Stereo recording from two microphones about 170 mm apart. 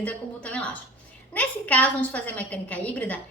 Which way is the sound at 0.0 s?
10° left (ahead or behind).